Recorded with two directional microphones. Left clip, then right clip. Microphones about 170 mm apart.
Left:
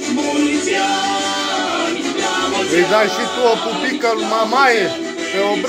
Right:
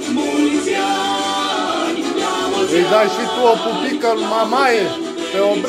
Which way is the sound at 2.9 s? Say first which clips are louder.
Right 1 dB; 10° right (ahead or behind).